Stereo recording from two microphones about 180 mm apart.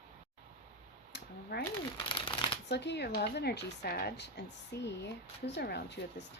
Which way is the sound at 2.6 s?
70° left (ahead or behind).